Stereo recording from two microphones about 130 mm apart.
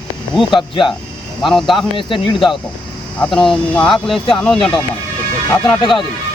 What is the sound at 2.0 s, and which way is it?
Speech, 40° left (ahead or behind).